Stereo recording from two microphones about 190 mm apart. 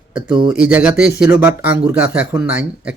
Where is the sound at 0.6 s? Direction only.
5° right (ahead or behind).